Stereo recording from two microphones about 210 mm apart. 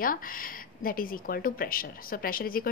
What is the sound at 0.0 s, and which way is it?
Speech, 40° left (ahead or behind).